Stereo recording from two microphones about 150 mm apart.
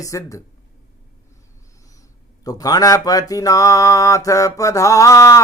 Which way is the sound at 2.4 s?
25° left (ahead or behind).